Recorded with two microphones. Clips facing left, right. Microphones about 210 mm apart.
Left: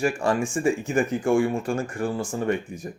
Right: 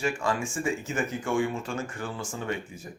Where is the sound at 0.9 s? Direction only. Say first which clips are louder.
Left 6 dB; 35° left (ahead or behind).